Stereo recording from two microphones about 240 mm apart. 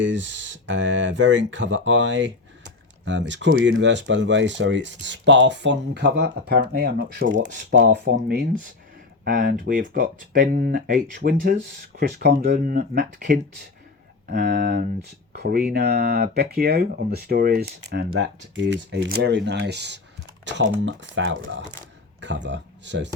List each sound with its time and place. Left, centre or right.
0.0 s speech: right